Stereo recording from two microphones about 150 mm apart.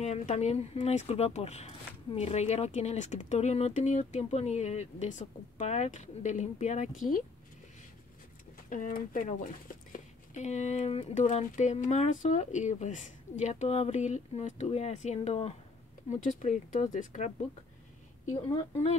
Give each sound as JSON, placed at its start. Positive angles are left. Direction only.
{"t": 0.0, "sound": "speech", "side_deg": 50}
{"t": 8.6, "sound": "speech", "side_deg": 60}